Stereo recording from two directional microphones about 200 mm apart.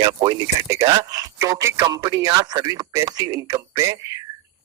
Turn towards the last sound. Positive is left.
turn(degrees=-15)  # may be behind; listen again after turning